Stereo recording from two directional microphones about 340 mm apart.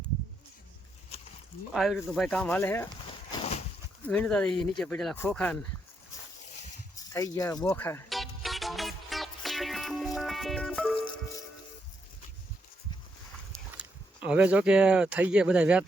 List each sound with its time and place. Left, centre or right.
1.7 s speech: centre
3.3 s a sound: centre
4.0 s speech: centre
6.9 s music: centre
14.3 s speech: centre